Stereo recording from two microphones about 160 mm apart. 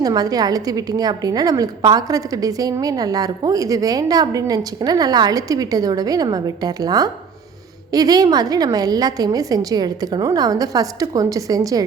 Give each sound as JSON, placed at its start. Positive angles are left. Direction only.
{"t": 0.0, "sound": "a woman's voice", "side_deg": -25}